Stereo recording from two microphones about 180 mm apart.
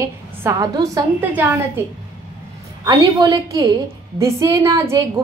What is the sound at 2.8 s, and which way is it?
A woman's voice, 20° right (ahead or behind).